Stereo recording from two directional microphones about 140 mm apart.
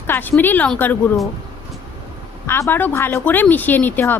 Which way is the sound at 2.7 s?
15° left (ahead or behind).